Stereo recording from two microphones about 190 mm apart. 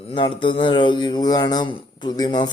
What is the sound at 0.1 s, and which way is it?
Speech, 25° left (ahead or behind).